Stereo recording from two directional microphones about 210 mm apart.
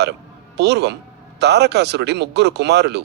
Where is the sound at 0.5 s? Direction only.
55° right (ahead or behind).